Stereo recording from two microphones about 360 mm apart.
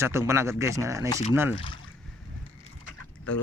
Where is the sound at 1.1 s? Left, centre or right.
Centre.